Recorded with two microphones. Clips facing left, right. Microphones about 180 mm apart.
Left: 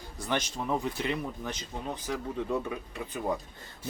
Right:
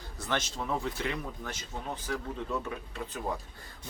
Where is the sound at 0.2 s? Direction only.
15° left (ahead or behind).